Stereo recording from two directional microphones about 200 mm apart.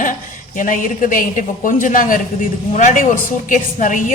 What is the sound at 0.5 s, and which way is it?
Speech, 40° left (ahead or behind).